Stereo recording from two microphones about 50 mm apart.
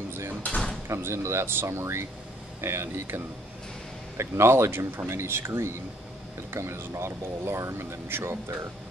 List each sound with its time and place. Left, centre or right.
0.8 s speech: right
4.2 s speech: right